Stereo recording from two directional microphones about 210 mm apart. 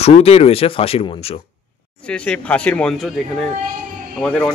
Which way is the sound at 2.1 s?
5° left (ahead or behind).